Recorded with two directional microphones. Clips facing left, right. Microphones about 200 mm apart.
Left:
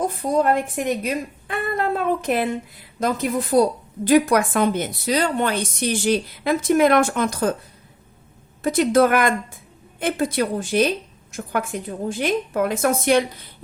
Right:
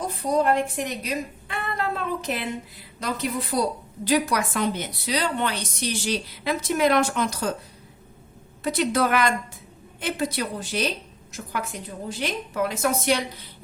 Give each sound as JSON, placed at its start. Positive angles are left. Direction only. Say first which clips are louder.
{"t": 0.0, "sound": "a woman's voice", "louder": "left 3 dB", "side_deg": 50}
{"t": 8.6, "sound": "a woman's voice", "louder": "left 6 dB", "side_deg": 50}